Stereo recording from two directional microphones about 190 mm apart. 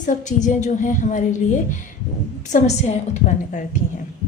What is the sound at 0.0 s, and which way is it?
A woman's voice, 40° left (ahead or behind).